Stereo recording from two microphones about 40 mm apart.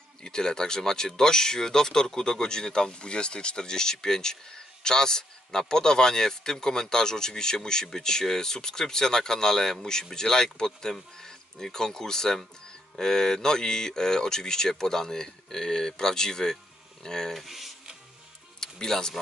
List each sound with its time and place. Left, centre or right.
0.2 s speech: centre
17.4 s speech: centre
18.6 s speech: centre